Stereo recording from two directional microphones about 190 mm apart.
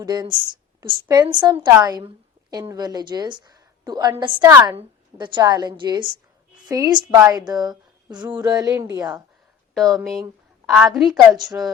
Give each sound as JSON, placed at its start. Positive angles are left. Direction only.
{"t": 0.0, "sound": "a woman's voice", "side_deg": -20}
{"t": 9.7, "sound": "a woman's voice", "side_deg": 0}